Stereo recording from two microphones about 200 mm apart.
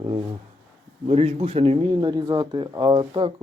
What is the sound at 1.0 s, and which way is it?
A man's voice, 30° right (ahead or behind).